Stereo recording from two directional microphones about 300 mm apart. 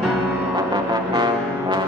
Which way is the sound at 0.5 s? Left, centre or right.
Centre.